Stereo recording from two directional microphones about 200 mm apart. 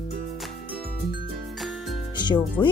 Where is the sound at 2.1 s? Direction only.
20° left (ahead or behind).